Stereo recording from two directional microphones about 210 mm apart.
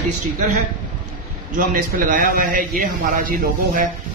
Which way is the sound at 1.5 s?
40° right (ahead or behind).